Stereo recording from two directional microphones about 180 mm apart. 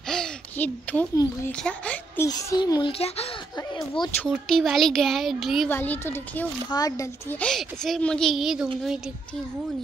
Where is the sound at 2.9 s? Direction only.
35° left (ahead or behind).